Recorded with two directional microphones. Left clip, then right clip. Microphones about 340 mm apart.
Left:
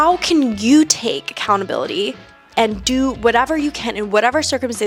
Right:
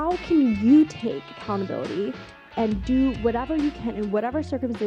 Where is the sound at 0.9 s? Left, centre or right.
Centre.